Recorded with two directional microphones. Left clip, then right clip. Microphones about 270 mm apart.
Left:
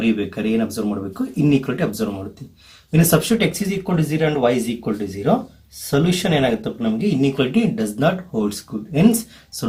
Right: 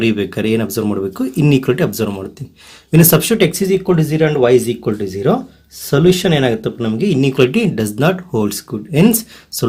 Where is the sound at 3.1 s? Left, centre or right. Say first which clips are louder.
Right 5 dB; right.